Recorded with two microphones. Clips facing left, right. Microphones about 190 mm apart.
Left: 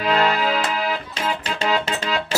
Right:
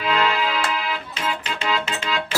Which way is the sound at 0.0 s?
45° left (ahead or behind).